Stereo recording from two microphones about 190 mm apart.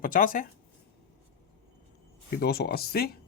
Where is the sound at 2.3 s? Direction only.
55° left (ahead or behind).